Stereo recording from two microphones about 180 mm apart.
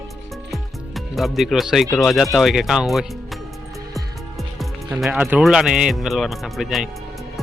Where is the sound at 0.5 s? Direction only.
Centre (ahead or behind).